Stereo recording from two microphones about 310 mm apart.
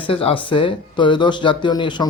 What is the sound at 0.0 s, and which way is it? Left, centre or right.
Speech, centre.